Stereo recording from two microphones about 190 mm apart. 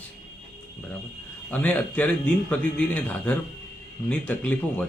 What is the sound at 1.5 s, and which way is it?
A man's voice, 5° left (ahead or behind).